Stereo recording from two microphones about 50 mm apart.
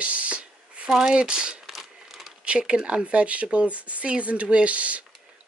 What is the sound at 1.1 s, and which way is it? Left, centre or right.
Speech, centre.